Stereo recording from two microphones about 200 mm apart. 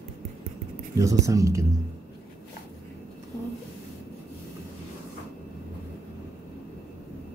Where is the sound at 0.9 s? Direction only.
15° right (ahead or behind).